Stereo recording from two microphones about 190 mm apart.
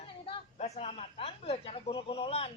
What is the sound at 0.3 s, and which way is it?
A man's voice, 35° left (ahead or behind).